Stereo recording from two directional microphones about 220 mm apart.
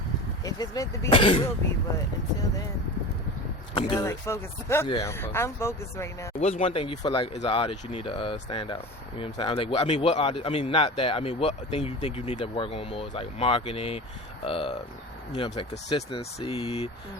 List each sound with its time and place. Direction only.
0.4 s speech: 15° left (ahead or behind)
3.8 s speech: 20° left (ahead or behind)
6.4 s speech: 25° left (ahead or behind)